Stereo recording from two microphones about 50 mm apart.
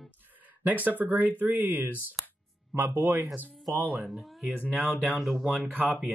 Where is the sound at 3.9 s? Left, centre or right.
Centre.